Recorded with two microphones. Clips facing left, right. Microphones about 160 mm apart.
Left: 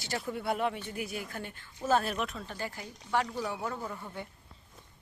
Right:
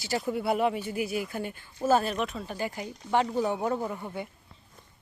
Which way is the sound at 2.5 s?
15° right (ahead or behind).